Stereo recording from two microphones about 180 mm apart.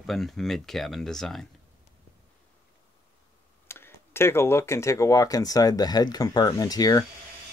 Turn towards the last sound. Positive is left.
turn(degrees=20)  # may be behind; listen again after turning